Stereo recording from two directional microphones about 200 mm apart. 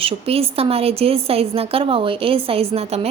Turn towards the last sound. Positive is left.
turn(degrees=-30)  # may be behind; listen again after turning